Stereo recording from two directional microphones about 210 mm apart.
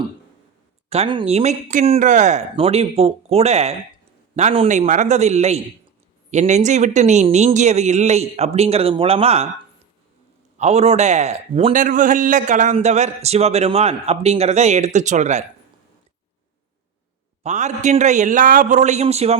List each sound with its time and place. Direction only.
0.9 s a man's voice: 25° right (ahead or behind)
10.6 s a man's voice: 30° right (ahead or behind)
17.4 s a man's voice: 35° right (ahead or behind)